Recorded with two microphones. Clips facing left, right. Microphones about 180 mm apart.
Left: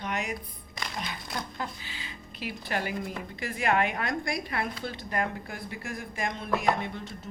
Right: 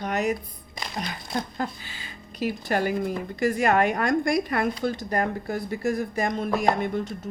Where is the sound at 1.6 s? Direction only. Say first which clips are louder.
Right 6 dB; 45° right (ahead or behind).